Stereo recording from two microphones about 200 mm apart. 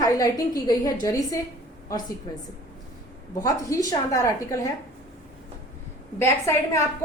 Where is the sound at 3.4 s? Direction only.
15° left (ahead or behind).